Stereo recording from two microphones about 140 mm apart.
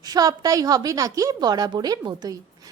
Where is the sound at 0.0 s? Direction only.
25° right (ahead or behind).